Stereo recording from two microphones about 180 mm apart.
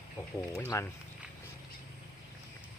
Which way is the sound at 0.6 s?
15° left (ahead or behind).